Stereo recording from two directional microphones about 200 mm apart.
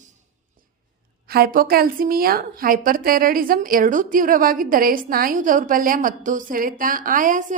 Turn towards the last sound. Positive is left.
turn(degrees=-40)  # may be behind; listen again after turning